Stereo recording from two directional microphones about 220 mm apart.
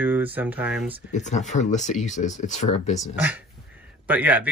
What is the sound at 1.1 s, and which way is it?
Speech, 35° left (ahead or behind).